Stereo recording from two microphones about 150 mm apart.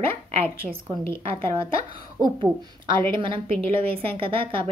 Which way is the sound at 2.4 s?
30° right (ahead or behind).